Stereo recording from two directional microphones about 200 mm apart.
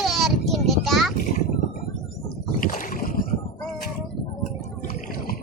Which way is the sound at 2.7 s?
45° left (ahead or behind).